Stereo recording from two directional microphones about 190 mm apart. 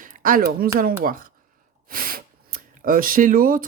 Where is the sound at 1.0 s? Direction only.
45° right (ahead or behind).